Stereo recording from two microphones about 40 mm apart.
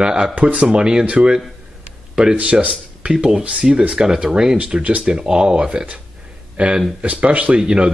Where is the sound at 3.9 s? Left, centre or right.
Centre.